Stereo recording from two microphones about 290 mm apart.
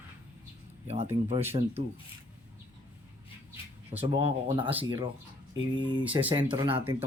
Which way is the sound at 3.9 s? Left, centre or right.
Right.